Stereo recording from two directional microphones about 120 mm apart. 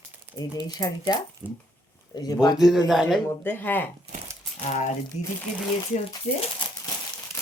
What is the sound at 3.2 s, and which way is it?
Speech, 15° left (ahead or behind).